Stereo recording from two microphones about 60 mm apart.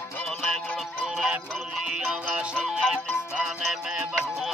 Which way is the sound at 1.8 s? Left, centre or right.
Centre.